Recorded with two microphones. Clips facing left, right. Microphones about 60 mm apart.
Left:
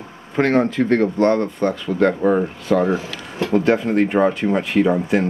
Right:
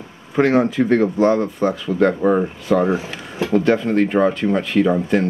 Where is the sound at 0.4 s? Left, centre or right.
Centre.